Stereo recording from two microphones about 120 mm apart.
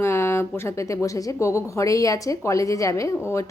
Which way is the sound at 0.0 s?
20° left (ahead or behind).